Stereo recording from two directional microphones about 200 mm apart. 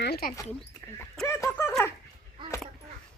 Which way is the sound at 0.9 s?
5° left (ahead or behind).